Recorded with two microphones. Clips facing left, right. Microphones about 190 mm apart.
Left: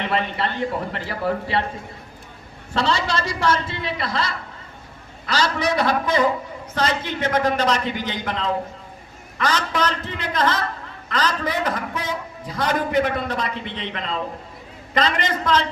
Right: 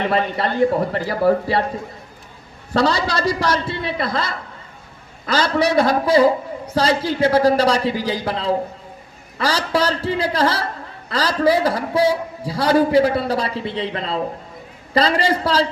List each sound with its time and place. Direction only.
0.0 s a man's voice: 40° right (ahead or behind)
2.7 s a man's voice: 40° right (ahead or behind)
3.9 s a woman's voice: 50° right (ahead or behind)
5.7 s a man's voice: 35° right (ahead or behind)